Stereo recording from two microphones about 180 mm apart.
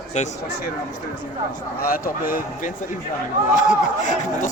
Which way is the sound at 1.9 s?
50° left (ahead or behind).